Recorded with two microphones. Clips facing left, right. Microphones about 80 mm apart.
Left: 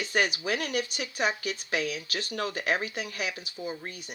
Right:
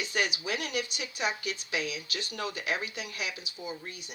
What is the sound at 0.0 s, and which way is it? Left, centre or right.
Speech, left.